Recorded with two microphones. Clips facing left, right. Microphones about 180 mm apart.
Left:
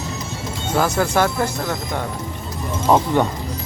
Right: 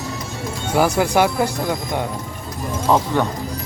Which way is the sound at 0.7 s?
15° right (ahead or behind).